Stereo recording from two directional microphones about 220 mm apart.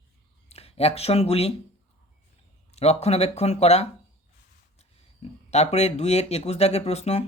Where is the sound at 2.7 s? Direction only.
30° left (ahead or behind).